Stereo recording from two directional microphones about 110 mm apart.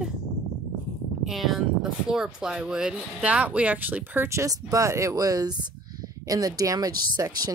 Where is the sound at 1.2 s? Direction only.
Centre (ahead or behind).